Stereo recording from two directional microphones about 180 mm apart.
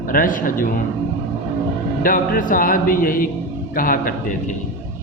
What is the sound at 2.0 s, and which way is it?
A man's voice, 50° left (ahead or behind).